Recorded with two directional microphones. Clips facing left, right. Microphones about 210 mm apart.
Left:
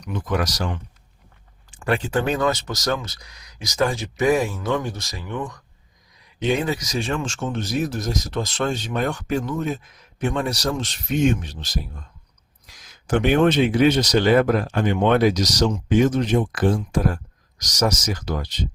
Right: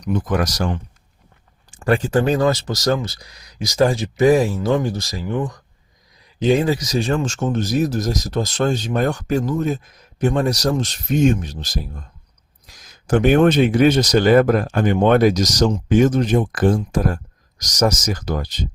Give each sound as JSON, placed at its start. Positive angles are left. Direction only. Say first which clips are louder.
{"t": 0.0, "sound": "speech", "louder": "right 4 dB", "side_deg": -45}
{"t": 13.1, "sound": "speech", "louder": "right 4 dB", "side_deg": -45}